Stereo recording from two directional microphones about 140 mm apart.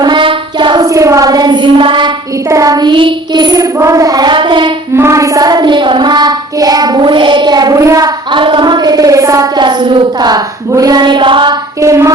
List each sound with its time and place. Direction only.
0.0 s child singing: 35° right (ahead or behind)
0.9 s child singing: 25° right (ahead or behind)
2.5 s child singing: 25° right (ahead or behind)
4.9 s child singing: 20° right (ahead or behind)
10.2 s speech: 30° right (ahead or behind)
11.8 s child singing: 20° right (ahead or behind)